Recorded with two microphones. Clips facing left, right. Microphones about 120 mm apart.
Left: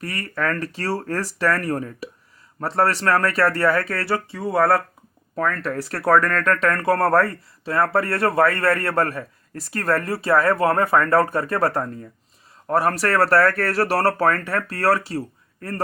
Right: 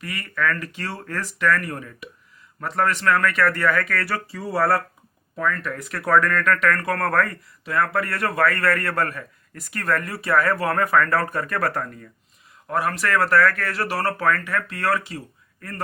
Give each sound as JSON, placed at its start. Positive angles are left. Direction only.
{"t": 0.0, "sound": "speech", "side_deg": 40}
{"t": 5.4, "sound": "speech", "side_deg": 35}
{"t": 12.6, "sound": "speech", "side_deg": 40}